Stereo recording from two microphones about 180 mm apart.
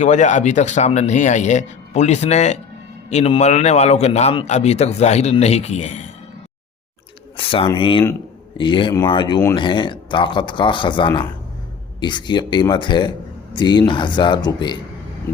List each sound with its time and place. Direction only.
0.0 s a man's voice: 40° left (ahead or behind)
7.3 s a sound: 30° left (ahead or behind)
7.8 s speech: 30° left (ahead or behind)